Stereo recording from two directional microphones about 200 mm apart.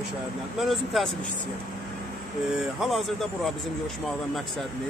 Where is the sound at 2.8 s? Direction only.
Centre (ahead or behind).